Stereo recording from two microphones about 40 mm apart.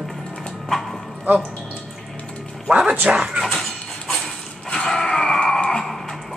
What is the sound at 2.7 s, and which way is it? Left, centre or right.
Speech, right.